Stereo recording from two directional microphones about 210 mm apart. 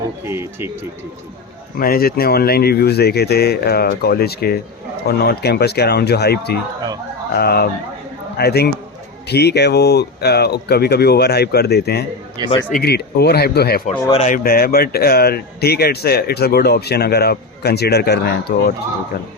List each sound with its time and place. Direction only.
0.3 s speech: 10° right (ahead or behind)
1.8 s a man's voice: 45° left (ahead or behind)
12.4 s a man's voice: 20° right (ahead or behind)
12.7 s a man's voice: 50° left (ahead or behind)
13.9 s a man's voice: 30° left (ahead or behind); by 18.7 s 50° left (ahead or behind)